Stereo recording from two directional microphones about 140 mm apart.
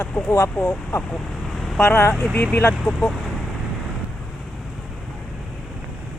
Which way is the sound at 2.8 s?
5° left (ahead or behind).